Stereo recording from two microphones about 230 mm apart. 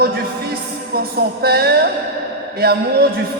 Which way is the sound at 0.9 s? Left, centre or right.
Right.